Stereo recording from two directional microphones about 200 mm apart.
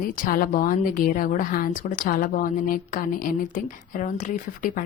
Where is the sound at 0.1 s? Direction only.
45° left (ahead or behind).